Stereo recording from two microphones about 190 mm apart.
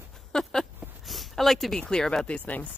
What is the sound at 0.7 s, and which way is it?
A woman's voice, centre (ahead or behind).